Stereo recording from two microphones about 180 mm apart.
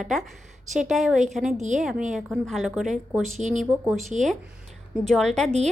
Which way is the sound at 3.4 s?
40° right (ahead or behind).